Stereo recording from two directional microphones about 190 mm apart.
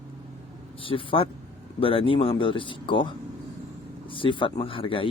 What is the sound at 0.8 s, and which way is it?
A man's voice, 30° left (ahead or behind).